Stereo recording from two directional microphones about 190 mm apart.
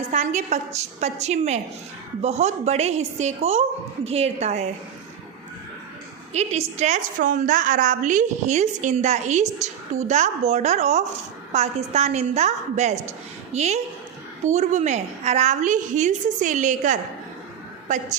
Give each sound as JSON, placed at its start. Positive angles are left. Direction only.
{"t": 0.1, "sound": "a woman's voice", "side_deg": -40}
{"t": 6.3, "sound": "a woman's voice", "side_deg": -35}